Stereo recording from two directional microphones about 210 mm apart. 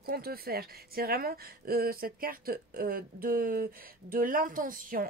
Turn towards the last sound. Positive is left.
turn(degrees=-40)  # may be behind; listen again after turning